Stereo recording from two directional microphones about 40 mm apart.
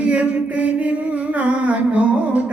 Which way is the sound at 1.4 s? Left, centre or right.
Right.